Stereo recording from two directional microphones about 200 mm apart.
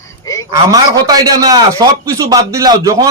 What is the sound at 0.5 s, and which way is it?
A man's voice, 20° right (ahead or behind).